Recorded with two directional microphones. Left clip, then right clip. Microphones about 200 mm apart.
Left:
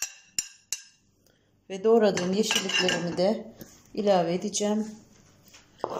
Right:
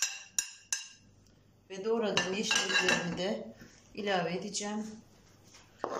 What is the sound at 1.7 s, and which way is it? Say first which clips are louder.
Dishes: left 11 dB; 40° left (ahead or behind).